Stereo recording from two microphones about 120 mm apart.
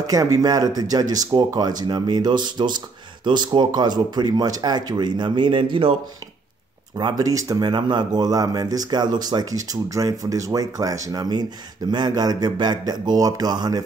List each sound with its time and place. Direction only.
0.0 s speech: 30° right (ahead or behind); by 5.9 s 50° right (ahead or behind)
7.0 s speech: 35° right (ahead or behind)